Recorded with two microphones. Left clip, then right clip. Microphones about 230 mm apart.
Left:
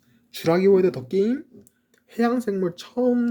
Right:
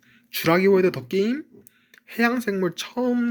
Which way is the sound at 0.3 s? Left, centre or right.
Centre.